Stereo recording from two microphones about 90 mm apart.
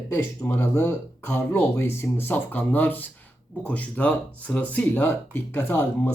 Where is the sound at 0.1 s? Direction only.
25° left (ahead or behind).